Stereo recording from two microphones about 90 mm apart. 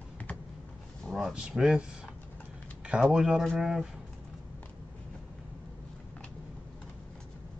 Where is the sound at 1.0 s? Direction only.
5° right (ahead or behind).